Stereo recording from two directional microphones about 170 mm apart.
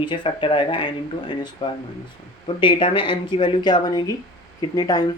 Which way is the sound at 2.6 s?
30° left (ahead or behind).